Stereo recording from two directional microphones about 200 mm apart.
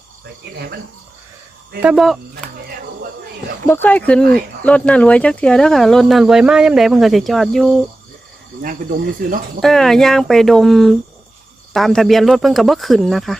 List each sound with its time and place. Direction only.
0.5 s speech: 55° right (ahead or behind)
1.8 s speech: 5° right (ahead or behind)
2.3 s music: 50° right (ahead or behind)
3.7 s speech: 10° left (ahead or behind)
9.6 s speech: centre (ahead or behind)